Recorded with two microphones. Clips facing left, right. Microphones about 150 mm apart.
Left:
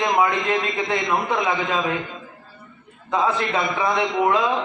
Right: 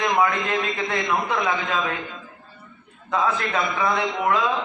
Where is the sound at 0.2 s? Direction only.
25° left (ahead or behind).